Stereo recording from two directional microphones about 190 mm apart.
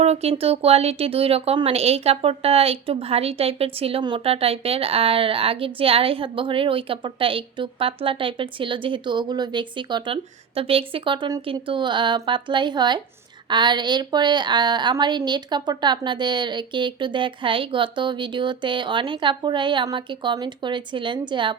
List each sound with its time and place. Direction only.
0.0 s speech: 35° right (ahead or behind)